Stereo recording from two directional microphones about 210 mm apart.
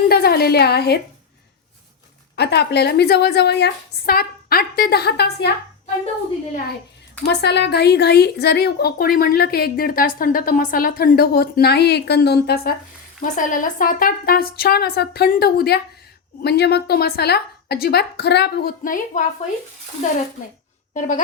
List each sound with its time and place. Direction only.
0.1 s a woman's voice: 50° left (ahead or behind)
2.3 s a woman's voice: 50° left (ahead or behind)
7.3 s a woman's voice: 55° left (ahead or behind)
13.2 s a woman's voice: 35° left (ahead or behind)
20.9 s speech: 35° left (ahead or behind)